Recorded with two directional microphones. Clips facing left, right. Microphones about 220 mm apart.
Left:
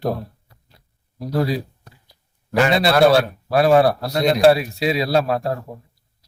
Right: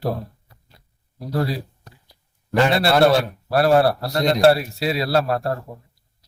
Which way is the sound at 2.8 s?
15° left (ahead or behind).